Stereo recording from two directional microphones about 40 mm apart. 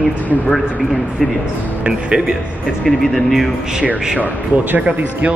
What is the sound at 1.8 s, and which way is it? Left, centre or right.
Speech, right.